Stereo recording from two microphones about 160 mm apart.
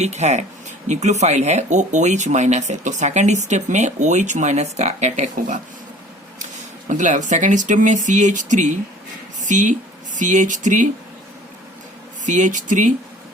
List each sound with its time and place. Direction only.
0.0 s speech: 45° right (ahead or behind)
6.8 s speech: 50° right (ahead or behind)
12.2 s speech: 50° right (ahead or behind)